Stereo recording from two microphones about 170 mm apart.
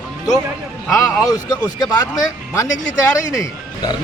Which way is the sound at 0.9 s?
20° left (ahead or behind).